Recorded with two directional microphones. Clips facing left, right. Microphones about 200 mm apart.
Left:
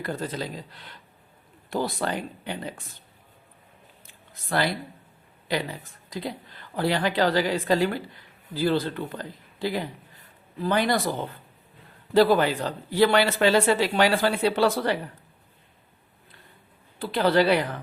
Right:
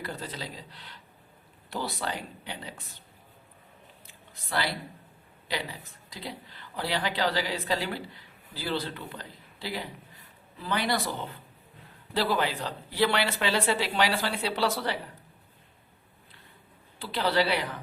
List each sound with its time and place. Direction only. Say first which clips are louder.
0.0 s a woman's voice: left 7 dB; 50° left (ahead or behind)
4.0 s a sound: even; 50° left (ahead or behind)
6.1 s a woman's voice: left 7 dB; 50° left (ahead or behind)
12.1 s a woman's voice: left 9 dB; 45° left (ahead or behind)
17.0 s a woman's voice: left 6 dB; 50° left (ahead or behind)